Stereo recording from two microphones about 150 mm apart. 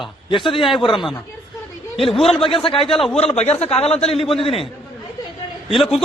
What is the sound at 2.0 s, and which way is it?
Speech, centre (ahead or behind).